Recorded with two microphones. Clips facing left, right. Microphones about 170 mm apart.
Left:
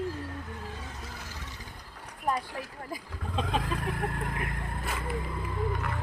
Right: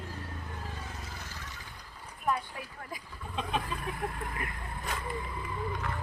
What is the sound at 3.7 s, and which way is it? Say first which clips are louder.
Vehicle: left 4 dB; 80° left.